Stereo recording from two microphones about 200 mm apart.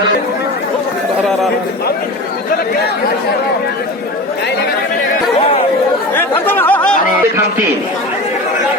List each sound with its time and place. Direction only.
6.1 s chatter: 10° left (ahead or behind)